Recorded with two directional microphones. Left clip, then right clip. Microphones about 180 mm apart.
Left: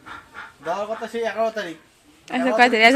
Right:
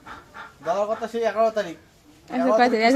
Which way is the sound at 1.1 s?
35° right (ahead or behind).